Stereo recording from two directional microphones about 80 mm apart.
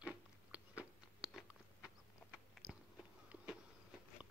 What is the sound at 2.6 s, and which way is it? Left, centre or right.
Biting, centre.